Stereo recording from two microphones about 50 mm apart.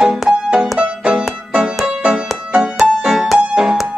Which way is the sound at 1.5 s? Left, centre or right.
Centre.